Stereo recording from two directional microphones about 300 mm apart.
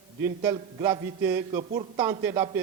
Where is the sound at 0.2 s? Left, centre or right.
Centre.